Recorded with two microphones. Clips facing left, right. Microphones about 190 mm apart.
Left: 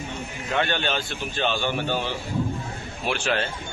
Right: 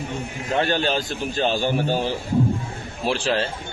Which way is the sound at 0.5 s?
35° right (ahead or behind).